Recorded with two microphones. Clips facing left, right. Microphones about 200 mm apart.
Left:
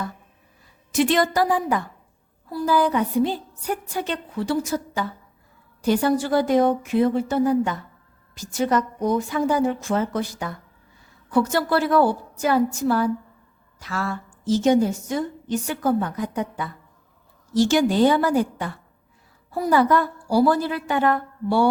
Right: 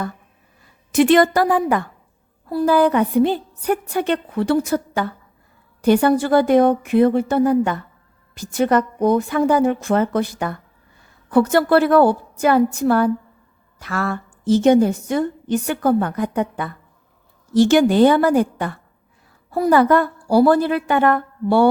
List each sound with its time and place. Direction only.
0.9 s a woman's voice: 55° right (ahead or behind)